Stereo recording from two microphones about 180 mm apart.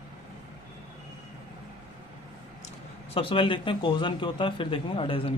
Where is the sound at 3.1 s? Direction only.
30° left (ahead or behind).